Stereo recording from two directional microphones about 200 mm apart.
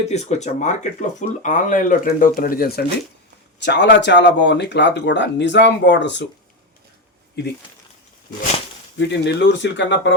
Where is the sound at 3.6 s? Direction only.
60° left (ahead or behind).